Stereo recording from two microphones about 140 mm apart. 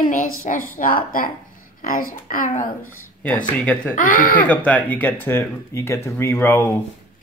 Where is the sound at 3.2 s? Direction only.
10° left (ahead or behind).